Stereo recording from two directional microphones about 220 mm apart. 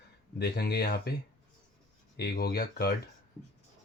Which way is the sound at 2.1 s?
45° left (ahead or behind).